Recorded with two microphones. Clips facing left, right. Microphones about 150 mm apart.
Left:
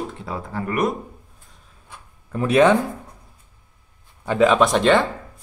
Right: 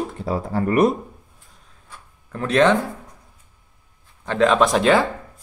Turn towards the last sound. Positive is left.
turn(degrees=-5)  # may be behind; listen again after turning